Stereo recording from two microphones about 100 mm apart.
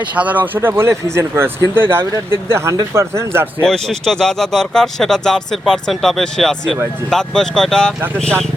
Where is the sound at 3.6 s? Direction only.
5° left (ahead or behind).